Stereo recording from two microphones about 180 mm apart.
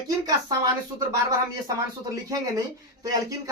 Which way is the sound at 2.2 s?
20° right (ahead or behind).